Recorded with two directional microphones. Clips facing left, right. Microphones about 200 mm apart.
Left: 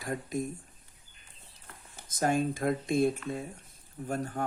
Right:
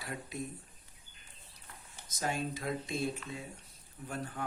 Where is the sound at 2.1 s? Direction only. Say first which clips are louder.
Left 8 dB; 50° left (ahead or behind).